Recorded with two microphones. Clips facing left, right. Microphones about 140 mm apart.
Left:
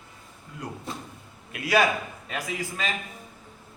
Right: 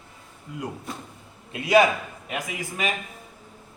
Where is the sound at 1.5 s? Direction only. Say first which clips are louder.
Right 4 dB; 20° right (ahead or behind).